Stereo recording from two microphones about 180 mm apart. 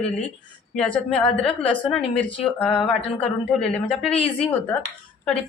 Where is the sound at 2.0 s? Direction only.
35° left (ahead or behind).